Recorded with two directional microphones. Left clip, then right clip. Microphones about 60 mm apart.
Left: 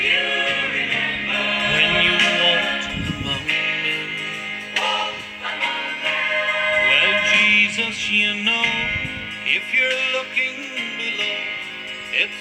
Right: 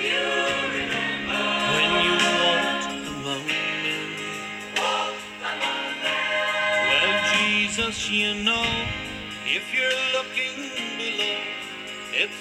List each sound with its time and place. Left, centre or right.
0.0 s music: right